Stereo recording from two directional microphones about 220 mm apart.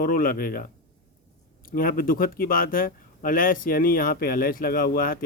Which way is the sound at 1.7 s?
40° left (ahead or behind).